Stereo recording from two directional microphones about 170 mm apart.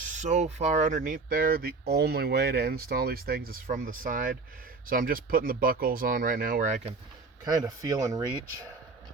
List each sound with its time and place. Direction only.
0.0 s speech: 45° right (ahead or behind)
7.4 s speech: 20° right (ahead or behind)